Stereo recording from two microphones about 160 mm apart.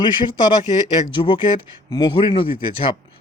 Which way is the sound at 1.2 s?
30° left (ahead or behind).